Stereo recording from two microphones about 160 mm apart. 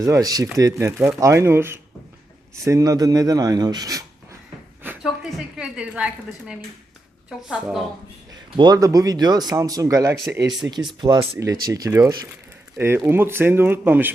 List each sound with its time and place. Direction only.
0.0 s speech: 20° right (ahead or behind)
4.8 s a woman's voice: 10° right (ahead or behind)
7.4 s a woman's voice: 5° right (ahead or behind)
8.5 s speech: 25° right (ahead or behind)